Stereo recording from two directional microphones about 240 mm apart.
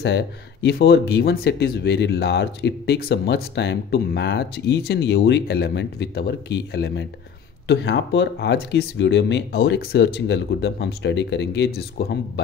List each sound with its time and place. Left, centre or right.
0.0 s speech: left